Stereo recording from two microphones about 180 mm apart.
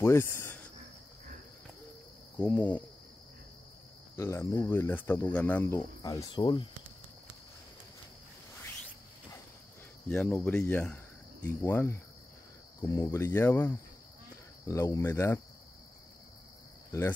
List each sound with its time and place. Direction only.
0.0 s speech: 15° left (ahead or behind)
2.3 s speech: 10° left (ahead or behind)
4.2 s speech: 15° left (ahead or behind)
10.0 s speech: 5° left (ahead or behind)